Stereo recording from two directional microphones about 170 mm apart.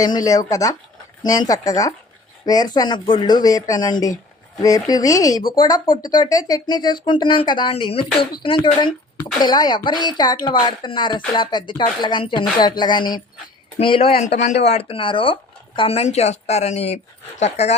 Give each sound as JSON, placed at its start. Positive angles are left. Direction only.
{"t": 0.0, "sound": "a woman's voice", "side_deg": 20}
{"t": 14.3, "sound": "speech", "side_deg": 45}
{"t": 14.7, "sound": "speech", "side_deg": 35}